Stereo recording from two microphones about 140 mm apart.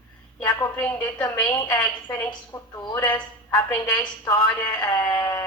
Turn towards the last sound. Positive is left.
turn(degrees=20)  # may be behind; listen again after turning